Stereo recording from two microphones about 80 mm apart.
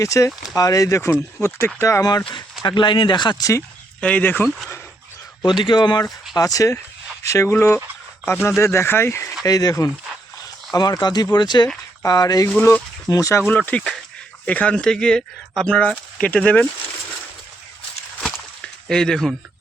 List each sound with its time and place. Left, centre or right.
0.0 s speech: left
2.0 s speech: left
2.6 s speech: left
4.0 s speech: left
5.5 s speech: left
6.3 s speech: left
9.4 s speech: left
12.0 s speech: left
13.5 s speech: centre
18.9 s speech: centre